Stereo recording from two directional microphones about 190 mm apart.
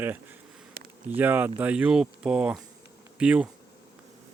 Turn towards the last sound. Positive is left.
turn(degrees=-5)  # may be behind; listen again after turning